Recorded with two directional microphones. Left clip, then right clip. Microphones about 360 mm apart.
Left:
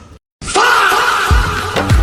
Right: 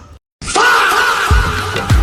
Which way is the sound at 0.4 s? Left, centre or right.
Centre.